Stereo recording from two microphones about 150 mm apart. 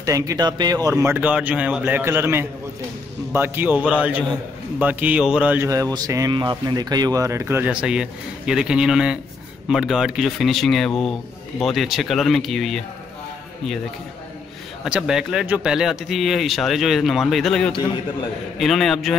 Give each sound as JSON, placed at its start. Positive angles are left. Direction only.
{"t": 0.0, "sound": "speech", "side_deg": -20}
{"t": 1.1, "sound": "a man's voice", "side_deg": -10}
{"t": 5.7, "sound": "speech", "side_deg": -25}
{"t": 7.7, "sound": "speech", "side_deg": -5}
{"t": 14.9, "sound": "speech", "side_deg": -5}